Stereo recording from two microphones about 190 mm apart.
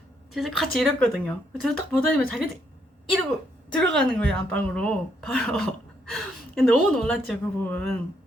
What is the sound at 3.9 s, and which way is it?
A woman's voice, 5° left (ahead or behind).